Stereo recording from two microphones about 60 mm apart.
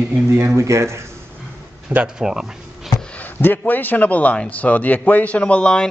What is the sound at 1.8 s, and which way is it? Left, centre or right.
Speech, centre.